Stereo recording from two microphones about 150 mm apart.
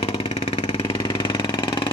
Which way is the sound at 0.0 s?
40° left (ahead or behind).